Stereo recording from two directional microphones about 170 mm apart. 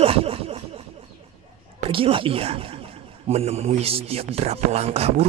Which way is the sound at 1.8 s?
30° right (ahead or behind).